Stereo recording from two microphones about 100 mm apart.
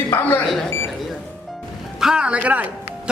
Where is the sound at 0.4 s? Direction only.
Centre (ahead or behind).